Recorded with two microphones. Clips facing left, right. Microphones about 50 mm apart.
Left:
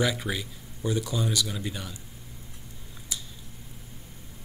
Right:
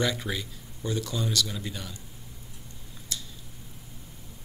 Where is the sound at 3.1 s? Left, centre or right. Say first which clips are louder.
Even; centre.